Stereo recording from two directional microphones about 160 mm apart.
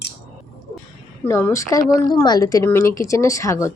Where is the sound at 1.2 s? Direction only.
15° left (ahead or behind).